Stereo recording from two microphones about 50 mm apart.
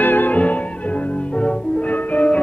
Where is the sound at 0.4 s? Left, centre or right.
Left.